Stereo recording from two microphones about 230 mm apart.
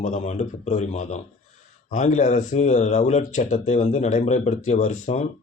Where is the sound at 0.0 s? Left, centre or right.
Left.